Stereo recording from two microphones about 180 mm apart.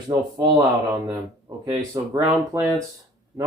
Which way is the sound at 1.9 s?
15° right (ahead or behind).